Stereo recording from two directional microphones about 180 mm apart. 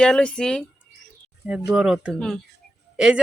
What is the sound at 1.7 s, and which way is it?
Speech, 5° right (ahead or behind).